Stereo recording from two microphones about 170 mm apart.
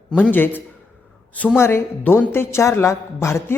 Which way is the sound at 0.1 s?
10° left (ahead or behind).